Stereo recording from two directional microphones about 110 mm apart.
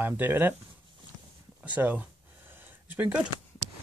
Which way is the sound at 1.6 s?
15° right (ahead or behind).